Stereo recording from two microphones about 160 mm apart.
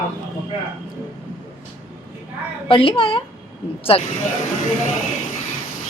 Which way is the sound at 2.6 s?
35° left (ahead or behind).